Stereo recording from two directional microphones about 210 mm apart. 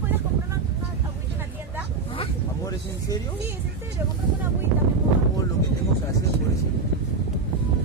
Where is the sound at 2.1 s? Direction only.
20° left (ahead or behind).